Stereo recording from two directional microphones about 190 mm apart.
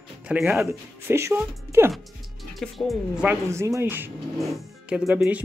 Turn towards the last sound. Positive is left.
turn(degrees=-10)  # may be behind; listen again after turning